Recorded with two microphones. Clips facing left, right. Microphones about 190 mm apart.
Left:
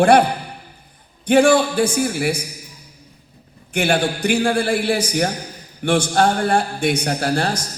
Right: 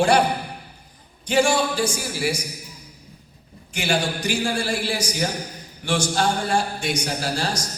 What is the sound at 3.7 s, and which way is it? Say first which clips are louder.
A man's voice: left 5 dB; 55° left (ahead or behind).